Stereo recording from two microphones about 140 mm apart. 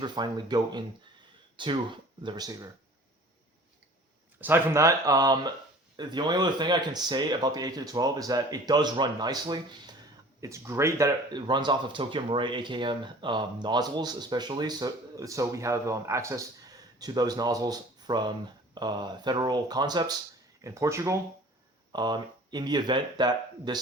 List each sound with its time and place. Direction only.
0.0 s speech: 30° right (ahead or behind)
4.4 s speech: 15° right (ahead or behind)
21.9 s speech: 30° right (ahead or behind)